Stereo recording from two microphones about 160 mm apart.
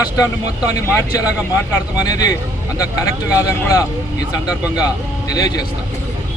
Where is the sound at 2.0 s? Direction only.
25° left (ahead or behind).